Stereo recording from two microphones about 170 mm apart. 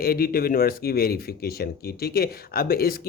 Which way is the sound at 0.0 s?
60° left (ahead or behind).